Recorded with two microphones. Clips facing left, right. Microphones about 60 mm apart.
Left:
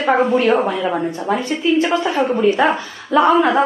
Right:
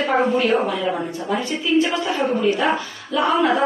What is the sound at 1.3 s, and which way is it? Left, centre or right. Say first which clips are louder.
A woman's voice: left 3 dB; left.